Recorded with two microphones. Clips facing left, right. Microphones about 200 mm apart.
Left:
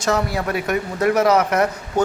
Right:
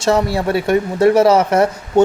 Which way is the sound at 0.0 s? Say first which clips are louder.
Right 5 dB; 30° right (ahead or behind).